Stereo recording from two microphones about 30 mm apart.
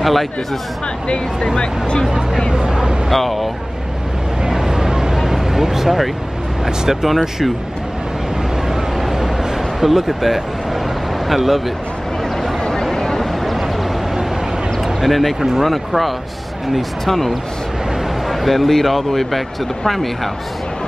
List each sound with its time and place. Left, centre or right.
0.0 s speech: centre
1.6 s speech: left
2.0 s speech: right
2.5 s a sound: right
3.1 s speech: centre
4.5 s a sound: centre
6.6 s speech: centre
8.6 s a sound: centre
11.2 s speech: centre
12.9 s vehicle: centre
13.2 s vehicle: centre
14.8 s a sound: centre
15.6 s speech: centre